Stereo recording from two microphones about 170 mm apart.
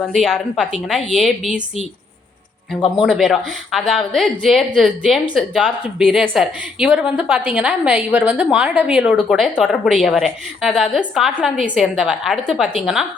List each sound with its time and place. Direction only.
0.0 s a woman's voice: centre (ahead or behind)
3.0 s a woman's voice: centre (ahead or behind)